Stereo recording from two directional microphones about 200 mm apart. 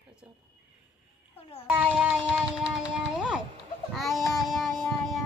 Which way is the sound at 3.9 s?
Centre (ahead or behind).